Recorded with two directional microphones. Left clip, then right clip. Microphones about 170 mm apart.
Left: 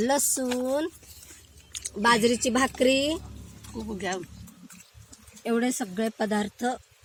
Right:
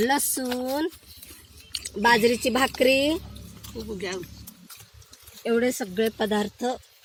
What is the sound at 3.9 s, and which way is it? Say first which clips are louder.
Speech: left 1 dB; 45° left (ahead or behind).